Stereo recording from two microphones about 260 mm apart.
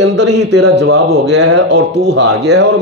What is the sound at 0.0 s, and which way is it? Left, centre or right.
A man's voice, right.